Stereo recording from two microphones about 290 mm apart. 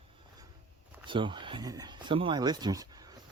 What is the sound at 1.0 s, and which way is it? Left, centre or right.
Speech, centre.